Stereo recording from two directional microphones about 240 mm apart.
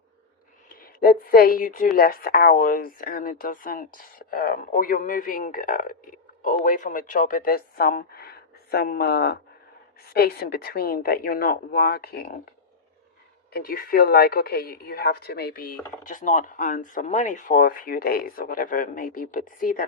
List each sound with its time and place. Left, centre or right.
0.7 s speech: left
13.5 s speech: left